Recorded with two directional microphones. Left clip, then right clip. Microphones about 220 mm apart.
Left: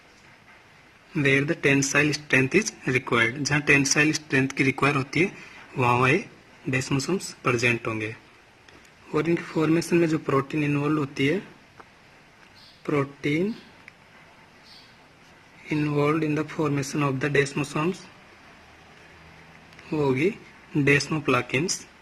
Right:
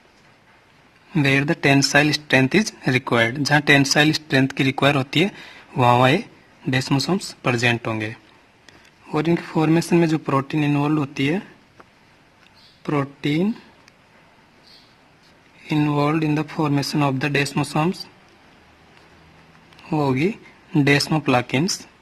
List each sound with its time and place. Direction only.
1.1 s speech: 50° right (ahead or behind)
9.2 s speech: 50° right (ahead or behind)
12.8 s speech: 55° right (ahead or behind)
15.7 s speech: 50° right (ahead or behind)
20.1 s speech: 50° right (ahead or behind)